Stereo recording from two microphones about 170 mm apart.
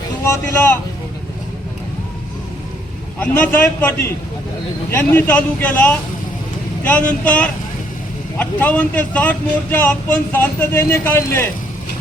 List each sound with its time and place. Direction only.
0.3 s speech: 15° left (ahead or behind)
3.2 s speech: 10° left (ahead or behind)